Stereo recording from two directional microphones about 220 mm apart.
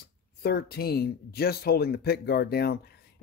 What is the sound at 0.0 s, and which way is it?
Speech, 45° left (ahead or behind).